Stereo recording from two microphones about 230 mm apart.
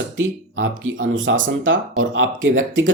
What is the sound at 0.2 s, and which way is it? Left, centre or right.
Speech, right.